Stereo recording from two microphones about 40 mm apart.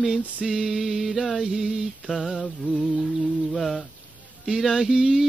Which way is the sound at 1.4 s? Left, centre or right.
Centre.